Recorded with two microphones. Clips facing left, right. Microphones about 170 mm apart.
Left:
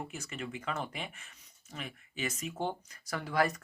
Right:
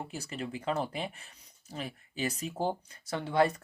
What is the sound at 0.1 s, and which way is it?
Speech, 35° right (ahead or behind).